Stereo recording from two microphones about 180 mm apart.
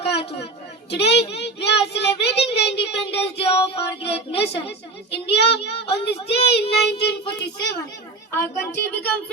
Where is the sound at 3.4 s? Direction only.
35° left (ahead or behind).